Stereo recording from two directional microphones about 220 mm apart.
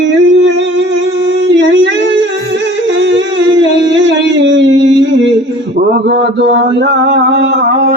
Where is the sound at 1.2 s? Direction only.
50° right (ahead or behind).